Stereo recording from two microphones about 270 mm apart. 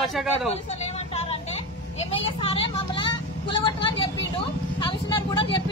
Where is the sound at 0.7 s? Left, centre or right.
Left.